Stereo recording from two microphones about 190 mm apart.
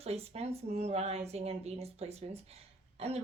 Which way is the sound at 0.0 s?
35° right (ahead or behind).